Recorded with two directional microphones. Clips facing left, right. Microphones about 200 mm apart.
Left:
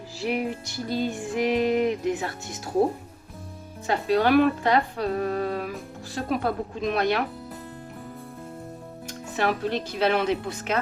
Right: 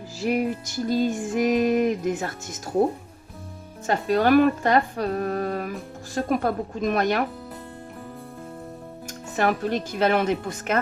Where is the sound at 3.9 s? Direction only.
45° right (ahead or behind).